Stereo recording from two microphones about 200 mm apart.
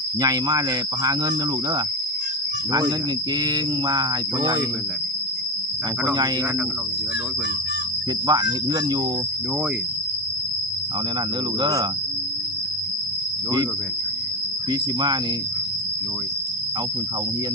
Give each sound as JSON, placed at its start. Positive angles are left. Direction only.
{"t": 0.2, "sound": "speech", "side_deg": -20}
{"t": 3.4, "sound": "speech", "side_deg": -20}
{"t": 8.3, "sound": "speech", "side_deg": -20}
{"t": 11.6, "sound": "cricket", "side_deg": -20}
{"t": 14.7, "sound": "speech", "side_deg": -20}